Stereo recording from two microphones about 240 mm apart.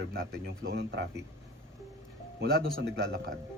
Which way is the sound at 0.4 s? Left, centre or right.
Right.